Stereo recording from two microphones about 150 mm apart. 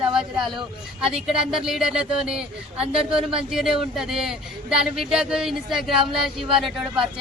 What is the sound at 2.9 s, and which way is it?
Speech, 35° right (ahead or behind).